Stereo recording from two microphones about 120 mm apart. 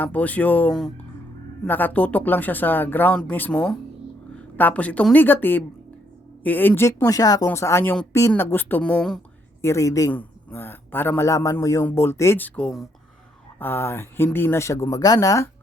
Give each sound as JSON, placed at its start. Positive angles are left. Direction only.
{"t": 0.0, "sound": "speech", "side_deg": 15}
{"t": 9.6, "sound": "speech", "side_deg": 25}
{"t": 13.6, "sound": "speech", "side_deg": 20}